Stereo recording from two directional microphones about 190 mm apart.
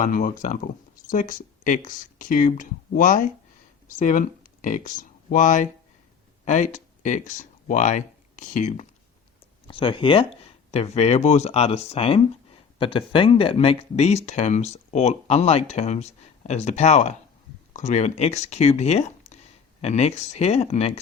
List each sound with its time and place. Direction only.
0.0 s speech: 45° left (ahead or behind)
9.6 s speech: 25° left (ahead or behind)